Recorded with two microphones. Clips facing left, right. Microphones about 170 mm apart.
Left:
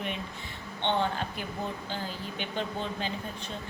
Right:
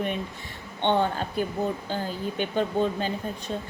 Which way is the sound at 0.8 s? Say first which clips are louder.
Right 5 dB; 50° right (ahead or behind).